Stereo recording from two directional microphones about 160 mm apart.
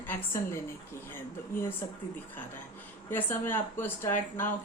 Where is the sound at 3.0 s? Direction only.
15° left (ahead or behind).